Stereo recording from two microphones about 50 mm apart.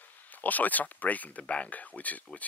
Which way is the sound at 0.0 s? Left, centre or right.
Left.